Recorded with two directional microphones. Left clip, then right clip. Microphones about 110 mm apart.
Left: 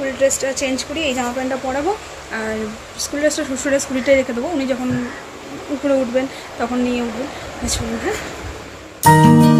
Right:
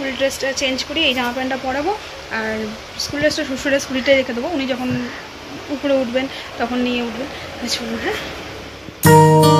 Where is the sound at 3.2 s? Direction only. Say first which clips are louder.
Even; 20° left (ahead or behind).